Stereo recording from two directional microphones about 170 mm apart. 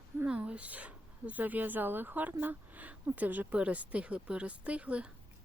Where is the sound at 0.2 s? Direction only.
5° right (ahead or behind).